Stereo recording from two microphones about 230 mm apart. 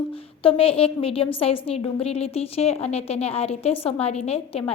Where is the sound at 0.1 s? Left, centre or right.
Left.